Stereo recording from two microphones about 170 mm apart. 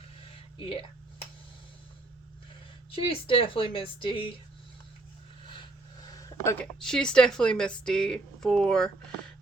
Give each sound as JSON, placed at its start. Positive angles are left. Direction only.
{"t": 0.6, "sound": "a woman's voice", "side_deg": 30}
{"t": 2.9, "sound": "a woman's voice", "side_deg": 30}
{"t": 6.1, "sound": "a sound", "side_deg": 20}
{"t": 6.7, "sound": "a woman's voice", "side_deg": 5}